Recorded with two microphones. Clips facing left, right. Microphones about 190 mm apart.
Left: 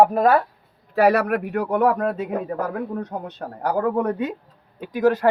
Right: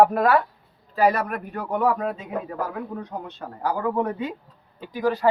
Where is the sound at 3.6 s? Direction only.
60° left (ahead or behind).